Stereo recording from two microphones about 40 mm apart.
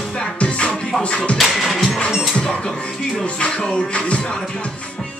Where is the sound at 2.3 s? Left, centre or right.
Left.